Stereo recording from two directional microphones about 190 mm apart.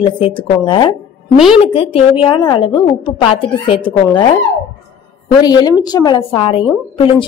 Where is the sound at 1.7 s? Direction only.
30° left (ahead or behind).